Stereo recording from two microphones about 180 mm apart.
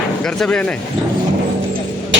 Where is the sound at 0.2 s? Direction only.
5° left (ahead or behind).